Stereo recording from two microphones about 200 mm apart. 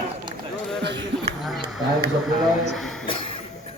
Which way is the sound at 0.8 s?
60° right (ahead or behind).